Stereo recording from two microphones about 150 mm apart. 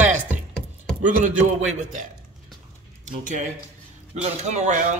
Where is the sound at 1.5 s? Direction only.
55° right (ahead or behind).